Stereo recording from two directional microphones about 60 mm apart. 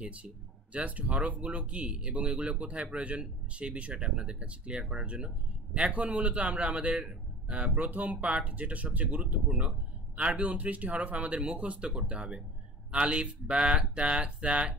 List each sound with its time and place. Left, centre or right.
0.0 s speech: right